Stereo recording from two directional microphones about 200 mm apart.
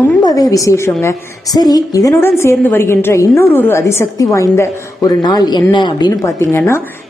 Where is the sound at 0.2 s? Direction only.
20° left (ahead or behind).